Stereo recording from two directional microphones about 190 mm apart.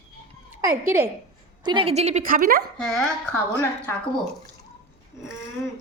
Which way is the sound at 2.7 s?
Centre (ahead or behind).